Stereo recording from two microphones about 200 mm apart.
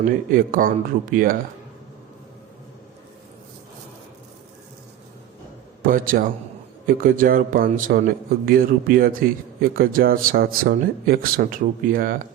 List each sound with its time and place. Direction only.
0.0 s a man's voice: 45° right (ahead or behind)
5.8 s a man's voice: 45° right (ahead or behind)